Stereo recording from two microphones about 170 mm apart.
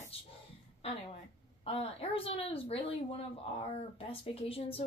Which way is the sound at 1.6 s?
35° left (ahead or behind).